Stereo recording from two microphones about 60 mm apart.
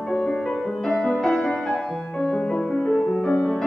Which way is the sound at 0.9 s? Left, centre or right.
Centre.